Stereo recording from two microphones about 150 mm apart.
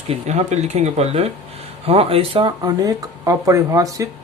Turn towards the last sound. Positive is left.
turn(degrees=-20)  # may be behind; listen again after turning